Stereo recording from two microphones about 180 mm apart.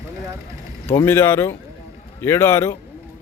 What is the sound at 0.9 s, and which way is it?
Speech, 15° left (ahead or behind).